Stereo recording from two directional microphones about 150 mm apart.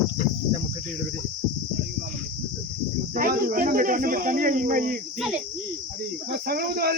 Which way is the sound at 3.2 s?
70° right (ahead or behind).